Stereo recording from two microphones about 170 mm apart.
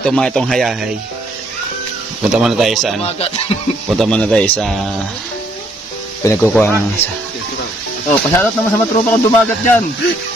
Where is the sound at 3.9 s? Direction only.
5° left (ahead or behind).